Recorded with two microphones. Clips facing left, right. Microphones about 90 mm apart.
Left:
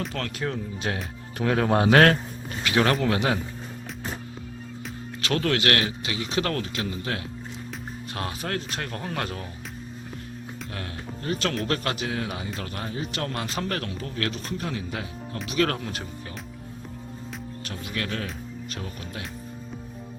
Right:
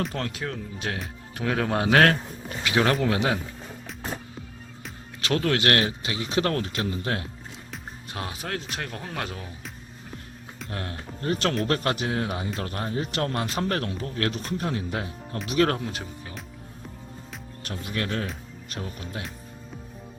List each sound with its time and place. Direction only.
0.1 s speech: 20° right (ahead or behind)
0.4 s speech: 5° left (ahead or behind)
2.6 s a man's voice: 15° right (ahead or behind)
5.2 s speech: 20° right (ahead or behind)
8.1 s speech: 10° right (ahead or behind)
10.7 s speech: 35° right (ahead or behind)
15.8 s a man's voice: 10° right (ahead or behind)
17.8 s speech: 30° right (ahead or behind)